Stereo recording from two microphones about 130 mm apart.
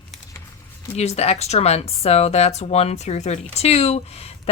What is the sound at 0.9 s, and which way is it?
Speech, 55° left (ahead or behind).